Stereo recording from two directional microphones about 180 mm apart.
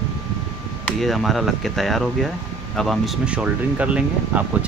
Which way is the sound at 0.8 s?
Centre (ahead or behind).